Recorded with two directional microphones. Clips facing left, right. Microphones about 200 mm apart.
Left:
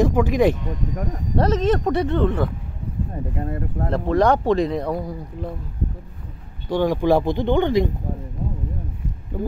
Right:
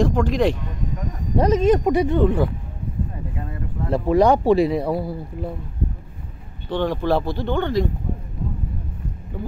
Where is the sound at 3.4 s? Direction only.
50° left (ahead or behind).